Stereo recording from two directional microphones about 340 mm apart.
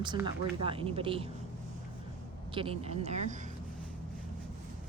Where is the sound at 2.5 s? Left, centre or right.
Centre.